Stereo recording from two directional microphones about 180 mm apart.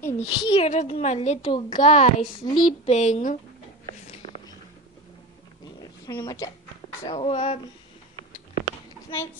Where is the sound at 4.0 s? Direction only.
40° left (ahead or behind).